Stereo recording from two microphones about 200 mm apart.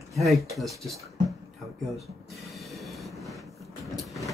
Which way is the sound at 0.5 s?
Centre (ahead or behind).